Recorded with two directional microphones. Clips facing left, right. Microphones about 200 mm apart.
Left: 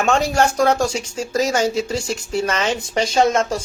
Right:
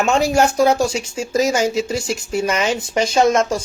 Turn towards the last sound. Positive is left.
turn(degrees=30)  # may be behind; listen again after turning